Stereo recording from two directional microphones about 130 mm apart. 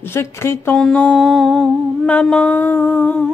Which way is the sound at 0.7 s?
5° left (ahead or behind).